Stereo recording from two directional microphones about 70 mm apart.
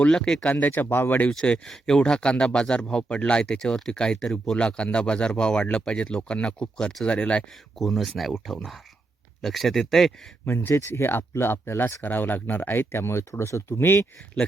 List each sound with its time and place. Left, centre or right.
0.0 s speech: centre
0.5 s speech: left
1.3 s speech: centre
7.8 s speech: centre
10.4 s speech: left